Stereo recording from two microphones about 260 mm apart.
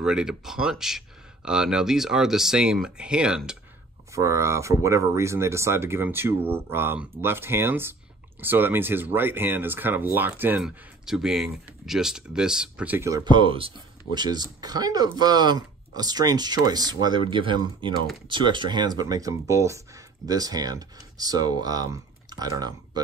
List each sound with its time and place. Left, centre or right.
0.0 s speech: centre